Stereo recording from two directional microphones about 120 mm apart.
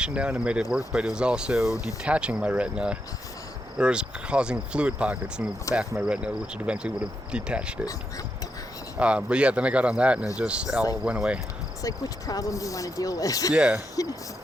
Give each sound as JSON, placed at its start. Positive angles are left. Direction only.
{"t": 0.0, "sound": "speech", "side_deg": -10}
{"t": 5.7, "sound": "speech", "side_deg": 25}
{"t": 6.0, "sound": "speech", "side_deg": -10}
{"t": 9.0, "sound": "speech", "side_deg": -10}
{"t": 11.8, "sound": "speech", "side_deg": 30}
{"t": 13.5, "sound": "speech", "side_deg": -10}
{"t": 13.9, "sound": "speech", "side_deg": 30}